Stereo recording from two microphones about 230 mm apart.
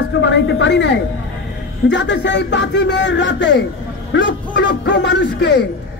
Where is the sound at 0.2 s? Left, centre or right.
Left.